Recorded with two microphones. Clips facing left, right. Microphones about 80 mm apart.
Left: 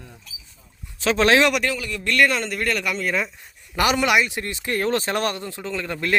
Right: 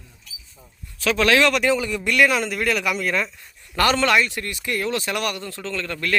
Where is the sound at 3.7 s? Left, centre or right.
Centre.